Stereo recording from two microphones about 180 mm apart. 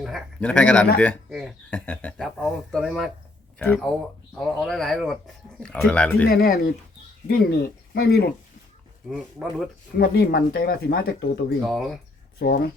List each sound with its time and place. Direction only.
0.0 s a man's voice: 5° left (ahead or behind)
4.4 s speech: centre (ahead or behind)
6.2 s speech: 55° left (ahead or behind)
9.0 s speech: centre (ahead or behind)
10.0 s speech: 55° left (ahead or behind)
11.7 s speech: centre (ahead or behind)
12.4 s speech: 60° left (ahead or behind)